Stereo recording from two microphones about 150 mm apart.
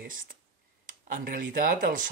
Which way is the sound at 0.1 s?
65° right (ahead or behind).